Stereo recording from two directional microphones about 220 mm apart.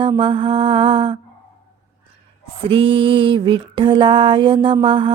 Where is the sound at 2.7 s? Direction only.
25° right (ahead or behind).